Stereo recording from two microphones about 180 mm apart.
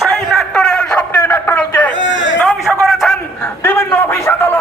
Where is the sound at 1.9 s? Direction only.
90° left.